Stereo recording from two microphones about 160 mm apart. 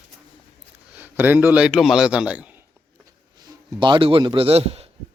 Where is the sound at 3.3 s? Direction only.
25° right (ahead or behind).